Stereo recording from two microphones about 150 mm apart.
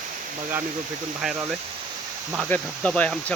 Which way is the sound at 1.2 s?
5° right (ahead or behind).